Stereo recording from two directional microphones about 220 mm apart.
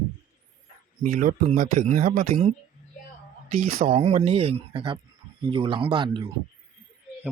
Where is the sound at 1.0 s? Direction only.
35° right (ahead or behind).